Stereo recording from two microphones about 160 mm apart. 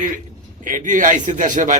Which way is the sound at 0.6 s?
55° right (ahead or behind).